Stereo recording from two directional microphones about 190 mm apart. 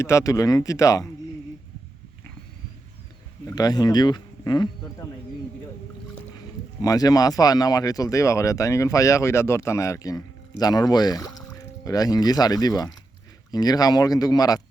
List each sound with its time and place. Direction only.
0.0 s speech: 15° left (ahead or behind)
3.4 s speech: 20° left (ahead or behind)
6.8 s speech: 20° left (ahead or behind)